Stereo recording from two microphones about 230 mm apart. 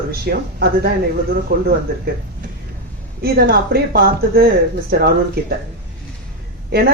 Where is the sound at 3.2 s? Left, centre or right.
Right.